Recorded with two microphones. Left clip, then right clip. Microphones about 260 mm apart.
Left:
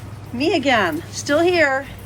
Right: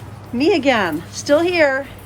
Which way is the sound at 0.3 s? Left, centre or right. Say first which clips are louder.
Right 2 dB; centre.